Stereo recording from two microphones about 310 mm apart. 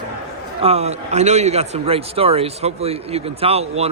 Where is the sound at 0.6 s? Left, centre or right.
Centre.